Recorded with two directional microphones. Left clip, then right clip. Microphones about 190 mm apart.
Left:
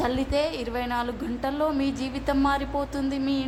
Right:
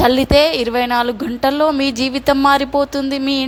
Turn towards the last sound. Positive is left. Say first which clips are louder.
# right 9 dB
turn(degrees=-35)  # may be behind; listen again after turning